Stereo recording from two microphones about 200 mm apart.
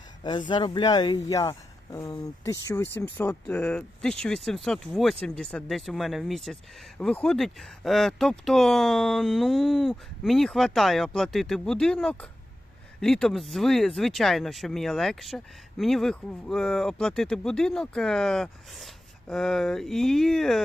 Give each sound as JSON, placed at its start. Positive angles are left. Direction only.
{"t": 0.2, "sound": "speech", "side_deg": 25}